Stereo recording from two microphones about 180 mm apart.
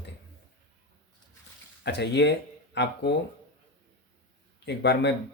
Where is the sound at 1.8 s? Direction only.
70° left (ahead or behind).